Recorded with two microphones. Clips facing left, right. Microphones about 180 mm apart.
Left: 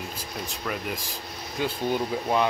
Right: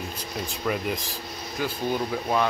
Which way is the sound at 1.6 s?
25° left (ahead or behind).